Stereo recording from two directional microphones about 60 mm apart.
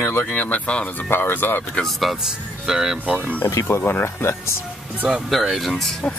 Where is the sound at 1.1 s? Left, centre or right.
Left.